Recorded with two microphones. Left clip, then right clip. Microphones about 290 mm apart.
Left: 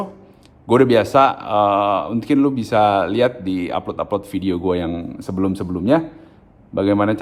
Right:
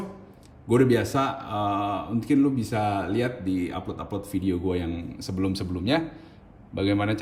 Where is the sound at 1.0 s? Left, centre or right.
Centre.